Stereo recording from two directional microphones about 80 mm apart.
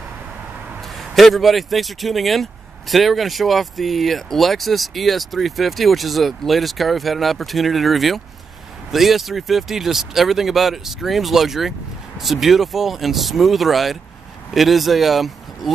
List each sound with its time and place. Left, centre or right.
0.9 s speech: centre